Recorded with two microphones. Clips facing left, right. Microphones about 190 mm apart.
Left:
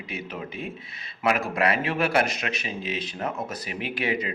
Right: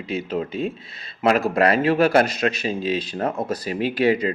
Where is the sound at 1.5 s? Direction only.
35° right (ahead or behind).